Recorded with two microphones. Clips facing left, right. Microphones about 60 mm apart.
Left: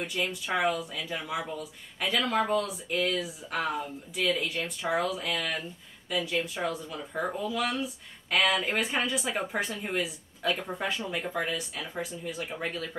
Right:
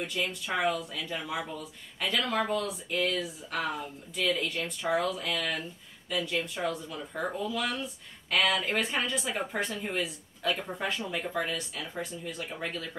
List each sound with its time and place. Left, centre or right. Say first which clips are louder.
0.0 s speech: left 1 dB; centre